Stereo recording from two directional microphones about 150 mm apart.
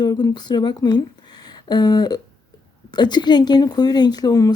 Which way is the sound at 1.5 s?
30° left (ahead or behind).